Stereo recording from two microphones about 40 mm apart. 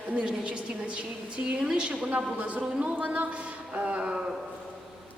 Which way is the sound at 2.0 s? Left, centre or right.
Right.